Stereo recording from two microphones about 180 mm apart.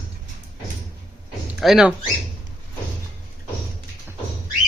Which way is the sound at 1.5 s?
Centre (ahead or behind).